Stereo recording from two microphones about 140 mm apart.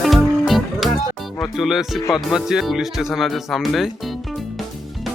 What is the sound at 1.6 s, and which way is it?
Speech, centre (ahead or behind).